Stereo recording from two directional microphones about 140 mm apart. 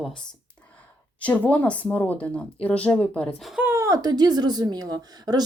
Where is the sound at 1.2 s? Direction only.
10° left (ahead or behind).